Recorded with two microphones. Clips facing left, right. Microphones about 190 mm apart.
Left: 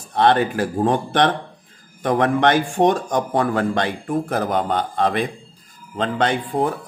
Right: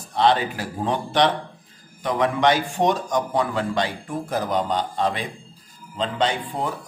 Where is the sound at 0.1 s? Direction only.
55° left (ahead or behind).